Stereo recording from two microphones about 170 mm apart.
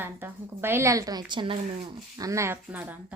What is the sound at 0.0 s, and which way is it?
A woman's voice, 10° right (ahead or behind).